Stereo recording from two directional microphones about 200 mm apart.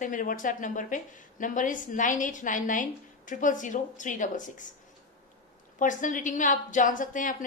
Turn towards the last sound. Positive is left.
turn(degrees=40)  # may be behind; listen again after turning